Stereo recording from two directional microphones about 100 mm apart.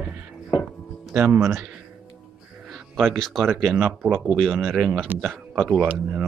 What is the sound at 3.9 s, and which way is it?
Speech, 15° right (ahead or behind).